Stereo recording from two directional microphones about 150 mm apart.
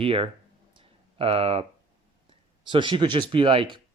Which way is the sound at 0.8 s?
40° right (ahead or behind).